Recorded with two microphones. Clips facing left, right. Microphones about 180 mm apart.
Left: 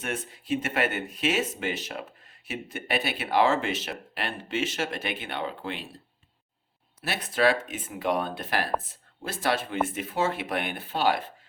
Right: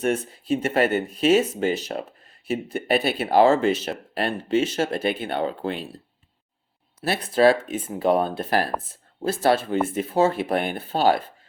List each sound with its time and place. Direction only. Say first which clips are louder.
0.0 s speech: right 10 dB; 35° right (ahead or behind)
7.0 s speech: right 7 dB; 35° right (ahead or behind)